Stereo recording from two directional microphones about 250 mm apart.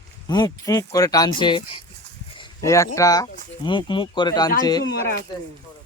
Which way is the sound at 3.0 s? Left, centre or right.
Centre.